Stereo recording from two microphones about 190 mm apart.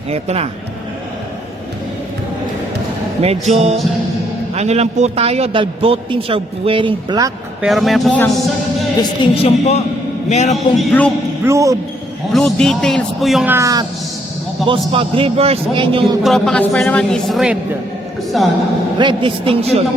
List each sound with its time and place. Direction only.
0.1 s speech: 35° right (ahead or behind)
3.4 s a man's voice: 35° right (ahead or behind)
7.6 s speech: centre (ahead or behind)
9.0 s a man's voice: 35° left (ahead or behind)
10.8 s speech: 5° left (ahead or behind)
11.4 s speech: 15° right (ahead or behind)
12.3 s speech: centre (ahead or behind); by 13.8 s 15° right (ahead or behind)
14.7 s a man's voice: 30° right (ahead or behind)
16.2 s speech: centre (ahead or behind)
18.9 s a man's voice: 25° right (ahead or behind)